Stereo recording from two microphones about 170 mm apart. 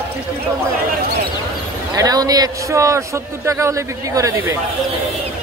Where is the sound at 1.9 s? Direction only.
20° right (ahead or behind).